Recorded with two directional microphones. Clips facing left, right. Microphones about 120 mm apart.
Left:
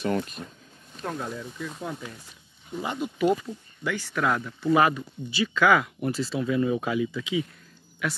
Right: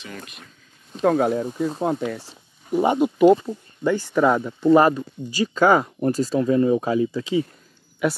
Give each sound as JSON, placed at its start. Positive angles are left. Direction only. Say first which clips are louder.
{"t": 0.0, "sound": "speech", "louder": "left 11 dB", "side_deg": 40}
{"t": 1.0, "sound": "speech", "louder": "right 14 dB", "side_deg": -70}
{"t": 1.5, "sound": "speech", "louder": "right 11 dB", "side_deg": -40}
{"t": 1.8, "sound": "speech", "louder": "right 12 dB", "side_deg": -55}
{"t": 3.3, "sound": "speech", "louder": "right 7 dB", "side_deg": -30}